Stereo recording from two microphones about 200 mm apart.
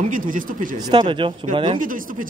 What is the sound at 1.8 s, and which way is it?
Speech, 40° right (ahead or behind).